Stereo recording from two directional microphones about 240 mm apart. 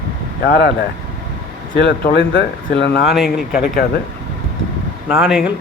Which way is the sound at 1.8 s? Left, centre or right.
Left.